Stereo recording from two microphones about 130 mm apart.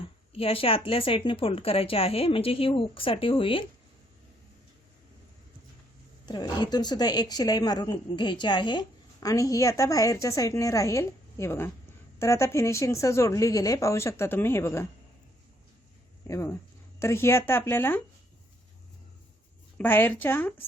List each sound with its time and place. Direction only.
0.3 s a woman's voice: 45° left (ahead or behind)
6.2 s a woman's voice: 30° left (ahead or behind)
16.2 s a woman's voice: 20° left (ahead or behind)
19.8 s speech: 15° left (ahead or behind)